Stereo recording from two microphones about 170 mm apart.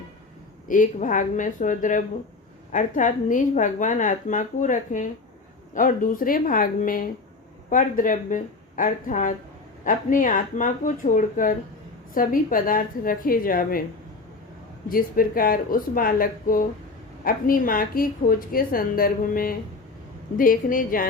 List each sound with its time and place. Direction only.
0.7 s a woman's voice: 50° left (ahead or behind)
14.8 s a woman's voice: 55° left (ahead or behind)